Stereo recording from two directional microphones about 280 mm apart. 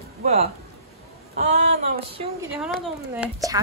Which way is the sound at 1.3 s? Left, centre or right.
Right.